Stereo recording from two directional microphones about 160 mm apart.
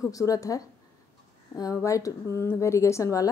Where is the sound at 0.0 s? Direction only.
20° left (ahead or behind).